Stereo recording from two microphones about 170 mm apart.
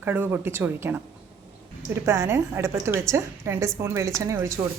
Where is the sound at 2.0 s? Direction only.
15° right (ahead or behind).